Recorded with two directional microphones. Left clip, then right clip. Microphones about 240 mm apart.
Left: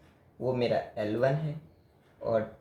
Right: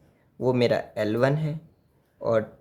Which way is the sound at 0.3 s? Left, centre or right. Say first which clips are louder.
Right 6 dB; right.